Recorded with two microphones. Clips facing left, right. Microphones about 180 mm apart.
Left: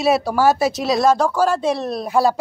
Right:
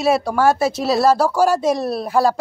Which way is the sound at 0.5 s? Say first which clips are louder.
Even; 25° right (ahead or behind).